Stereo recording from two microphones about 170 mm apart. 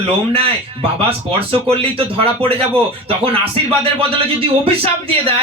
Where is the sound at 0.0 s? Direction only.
35° right (ahead or behind).